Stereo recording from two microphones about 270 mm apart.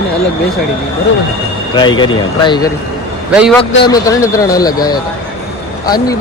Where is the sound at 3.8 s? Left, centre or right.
Centre.